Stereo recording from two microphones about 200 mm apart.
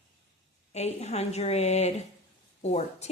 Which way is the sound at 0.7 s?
35° left (ahead or behind).